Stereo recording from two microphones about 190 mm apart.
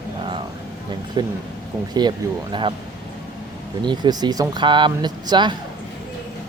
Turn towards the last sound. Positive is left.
turn(degrees=-25)  # may be behind; listen again after turning